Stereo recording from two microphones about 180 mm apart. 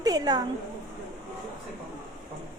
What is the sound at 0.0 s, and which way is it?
Speech, 20° right (ahead or behind).